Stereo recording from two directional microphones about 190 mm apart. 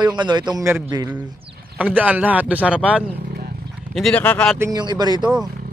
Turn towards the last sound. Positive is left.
turn(degrees=-20)  # may be behind; listen again after turning